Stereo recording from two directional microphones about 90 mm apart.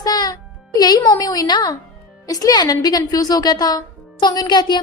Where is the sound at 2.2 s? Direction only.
40° left (ahead or behind).